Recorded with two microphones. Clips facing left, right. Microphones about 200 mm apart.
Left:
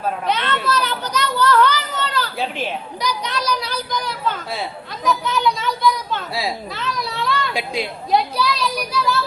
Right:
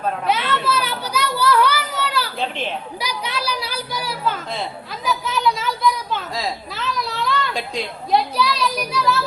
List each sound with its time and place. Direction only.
0.3 s a sound: 5° right (ahead or behind)
5.0 s children playing: 5° right (ahead or behind)
7.5 s a woman's voice: 10° left (ahead or behind)
8.1 s a child's voice: centre (ahead or behind)